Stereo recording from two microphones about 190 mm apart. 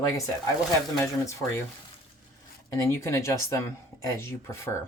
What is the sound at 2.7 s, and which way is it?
Speech, 15° left (ahead or behind).